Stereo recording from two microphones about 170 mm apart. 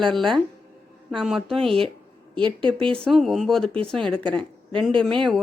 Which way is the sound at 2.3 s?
30° right (ahead or behind).